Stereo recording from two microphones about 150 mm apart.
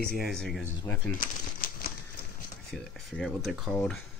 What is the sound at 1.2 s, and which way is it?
Bird, 75° left (ahead or behind).